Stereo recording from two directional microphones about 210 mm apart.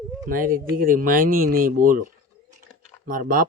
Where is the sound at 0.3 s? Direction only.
40° right (ahead or behind).